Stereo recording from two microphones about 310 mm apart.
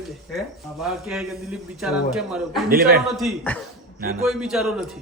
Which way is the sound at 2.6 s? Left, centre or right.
Right.